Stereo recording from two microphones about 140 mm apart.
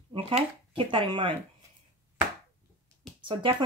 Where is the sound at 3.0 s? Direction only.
5° left (ahead or behind).